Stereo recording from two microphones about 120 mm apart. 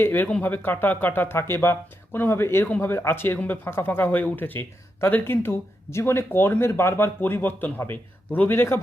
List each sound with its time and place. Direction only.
0.0 s speech: 15° left (ahead or behind)